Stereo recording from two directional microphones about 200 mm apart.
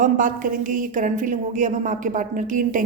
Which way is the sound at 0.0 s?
40° right (ahead or behind).